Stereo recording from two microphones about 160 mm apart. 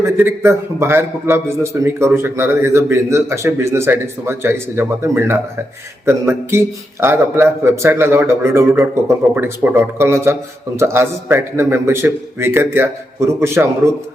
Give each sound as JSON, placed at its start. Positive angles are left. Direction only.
{"t": 0.0, "sound": "a man's voice", "side_deg": -15}